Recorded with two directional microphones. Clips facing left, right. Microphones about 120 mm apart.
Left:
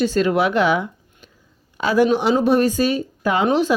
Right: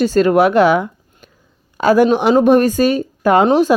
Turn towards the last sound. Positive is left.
turn(degrees=-45)  # may be behind; listen again after turning